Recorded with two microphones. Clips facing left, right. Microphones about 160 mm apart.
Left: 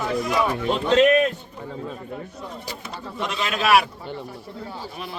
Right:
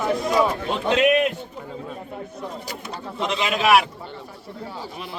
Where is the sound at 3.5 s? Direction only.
5° right (ahead or behind).